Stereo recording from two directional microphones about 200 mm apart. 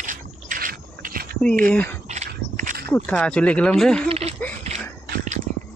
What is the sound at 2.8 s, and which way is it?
Speech, 10° left (ahead or behind).